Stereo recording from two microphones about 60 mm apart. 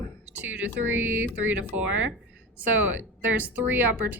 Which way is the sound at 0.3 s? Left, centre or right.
Right.